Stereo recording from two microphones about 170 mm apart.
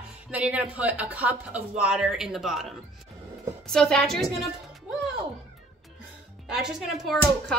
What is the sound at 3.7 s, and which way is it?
Speech, 5° left (ahead or behind).